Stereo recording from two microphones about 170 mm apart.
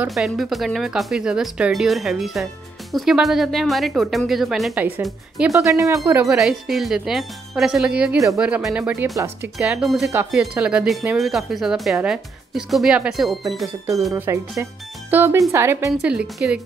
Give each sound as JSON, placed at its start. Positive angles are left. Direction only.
{"t": 0.0, "sound": "speech", "side_deg": 0}
{"t": 5.5, "sound": "speech", "side_deg": -20}
{"t": 6.2, "sound": "speech", "side_deg": 0}
{"t": 9.6, "sound": "speech", "side_deg": -5}
{"t": 13.8, "sound": "speech", "side_deg": -20}